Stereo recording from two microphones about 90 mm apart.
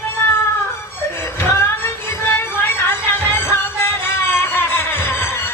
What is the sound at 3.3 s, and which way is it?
Music, 25° left (ahead or behind).